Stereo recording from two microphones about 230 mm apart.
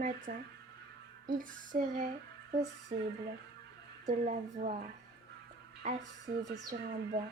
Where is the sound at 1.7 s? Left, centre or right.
Right.